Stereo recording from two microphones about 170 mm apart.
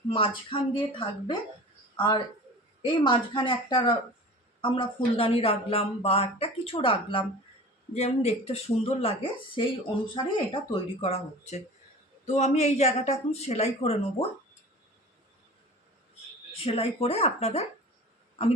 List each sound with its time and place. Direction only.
0.1 s speech: 30° left (ahead or behind)
16.6 s speech: 35° left (ahead or behind)